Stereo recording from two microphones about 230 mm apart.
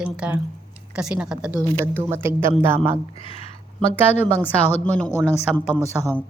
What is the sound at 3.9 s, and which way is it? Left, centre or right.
A woman's voice, centre.